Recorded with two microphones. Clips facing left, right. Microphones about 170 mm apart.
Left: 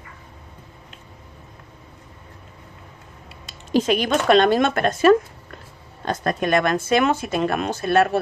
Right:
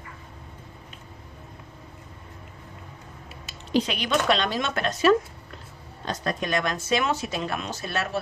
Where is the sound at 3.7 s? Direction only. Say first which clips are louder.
Left 5 dB; 45° left (ahead or behind).